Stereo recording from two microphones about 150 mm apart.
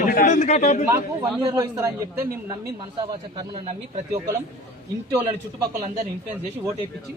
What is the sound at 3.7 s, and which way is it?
Speech, 45° right (ahead or behind).